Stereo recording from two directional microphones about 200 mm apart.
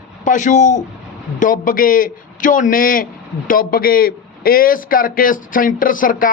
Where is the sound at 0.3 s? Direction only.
40° left (ahead or behind).